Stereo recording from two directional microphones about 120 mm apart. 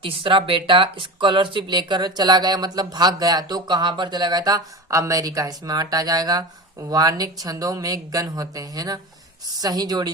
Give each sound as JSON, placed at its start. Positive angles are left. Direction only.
{"t": 0.0, "sound": "speech", "side_deg": -45}